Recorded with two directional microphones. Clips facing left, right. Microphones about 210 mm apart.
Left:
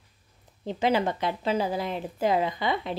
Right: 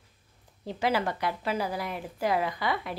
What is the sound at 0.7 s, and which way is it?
A woman's voice, 20° left (ahead or behind).